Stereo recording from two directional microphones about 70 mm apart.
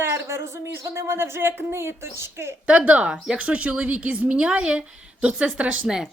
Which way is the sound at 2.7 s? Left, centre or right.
Centre.